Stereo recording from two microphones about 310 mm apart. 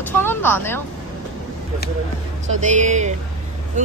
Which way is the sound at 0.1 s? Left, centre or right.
Centre.